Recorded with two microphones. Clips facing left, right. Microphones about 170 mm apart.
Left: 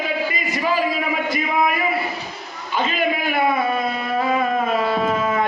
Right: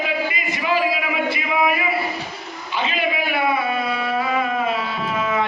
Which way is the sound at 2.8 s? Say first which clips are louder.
Left 1 dB; 45° left (ahead or behind).